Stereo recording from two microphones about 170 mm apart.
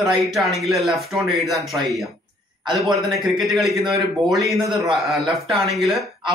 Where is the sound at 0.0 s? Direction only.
Centre (ahead or behind).